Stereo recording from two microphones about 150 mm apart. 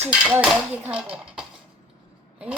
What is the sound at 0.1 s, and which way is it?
Speech, 10° right (ahead or behind).